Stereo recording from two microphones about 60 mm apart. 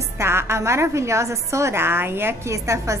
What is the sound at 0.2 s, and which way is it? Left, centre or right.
A woman's voice, right.